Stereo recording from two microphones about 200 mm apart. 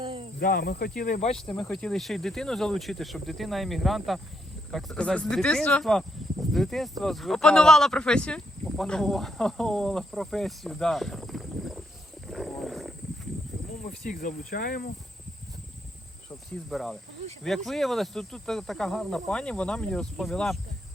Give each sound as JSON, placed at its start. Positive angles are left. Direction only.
{"t": 0.0, "sound": "snake", "side_deg": -25}
{"t": 0.3, "sound": "speech", "side_deg": 50}
{"t": 1.4, "sound": "speech", "side_deg": 5}
{"t": 12.3, "sound": "wild animals", "side_deg": 0}
{"t": 13.8, "sound": "speech", "side_deg": 40}
{"t": 16.6, "sound": "speech", "side_deg": 0}